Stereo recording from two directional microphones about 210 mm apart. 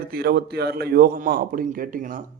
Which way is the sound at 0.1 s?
45° right (ahead or behind).